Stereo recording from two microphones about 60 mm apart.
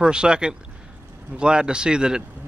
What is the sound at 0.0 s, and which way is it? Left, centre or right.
A man's voice, centre.